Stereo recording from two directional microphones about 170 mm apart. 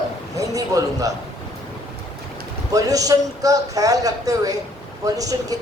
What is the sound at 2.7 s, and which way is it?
Speech, 20° right (ahead or behind).